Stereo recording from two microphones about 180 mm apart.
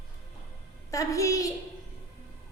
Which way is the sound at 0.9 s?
20° left (ahead or behind).